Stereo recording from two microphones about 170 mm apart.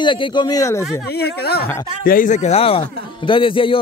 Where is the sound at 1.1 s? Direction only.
70° left (ahead or behind).